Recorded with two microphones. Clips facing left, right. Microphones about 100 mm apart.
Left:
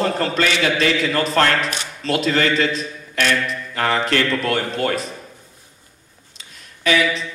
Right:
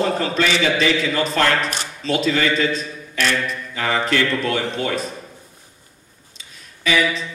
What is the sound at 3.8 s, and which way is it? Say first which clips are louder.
A man's voice: left 1 dB; 50° left (ahead or behind).